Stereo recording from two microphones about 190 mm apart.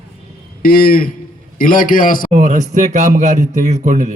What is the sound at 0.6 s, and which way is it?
A man's voice, 50° left (ahead or behind).